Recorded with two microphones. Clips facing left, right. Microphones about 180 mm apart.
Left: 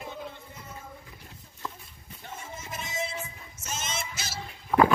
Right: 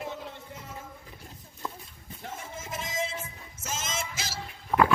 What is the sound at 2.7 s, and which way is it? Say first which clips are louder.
Music: right 1 dB; 90° right.